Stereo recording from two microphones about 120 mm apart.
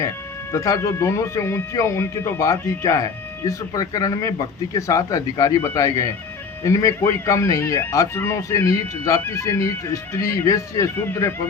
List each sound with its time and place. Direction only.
0.5 s speech: 25° left (ahead or behind)